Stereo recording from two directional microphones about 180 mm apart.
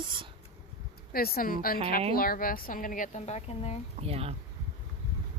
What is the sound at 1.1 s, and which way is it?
A woman's voice, 55° left (ahead or behind).